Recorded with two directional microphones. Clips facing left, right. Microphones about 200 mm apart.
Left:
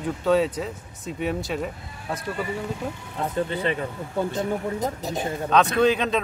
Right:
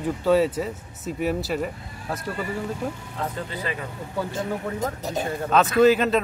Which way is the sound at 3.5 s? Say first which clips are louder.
Left 5 dB; 30° left (ahead or behind).